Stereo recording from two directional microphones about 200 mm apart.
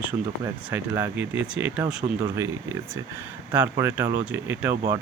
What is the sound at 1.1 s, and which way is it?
Speech, 65° right (ahead or behind).